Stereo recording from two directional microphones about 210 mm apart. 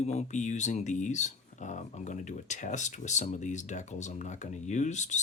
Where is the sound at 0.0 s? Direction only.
30° left (ahead or behind).